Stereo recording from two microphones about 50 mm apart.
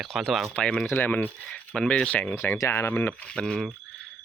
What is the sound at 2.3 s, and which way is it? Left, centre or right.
Speech, left.